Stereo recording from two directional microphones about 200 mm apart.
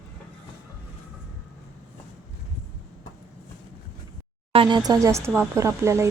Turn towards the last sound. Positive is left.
turn(degrees=-15)  # may be behind; listen again after turning